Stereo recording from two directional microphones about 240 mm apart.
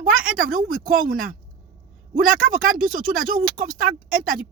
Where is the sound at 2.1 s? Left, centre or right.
Right.